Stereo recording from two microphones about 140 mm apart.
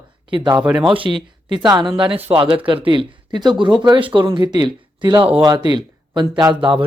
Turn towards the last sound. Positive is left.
turn(degrees=-40)  # may be behind; listen again after turning